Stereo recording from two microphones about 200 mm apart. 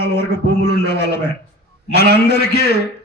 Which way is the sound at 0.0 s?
55° left (ahead or behind).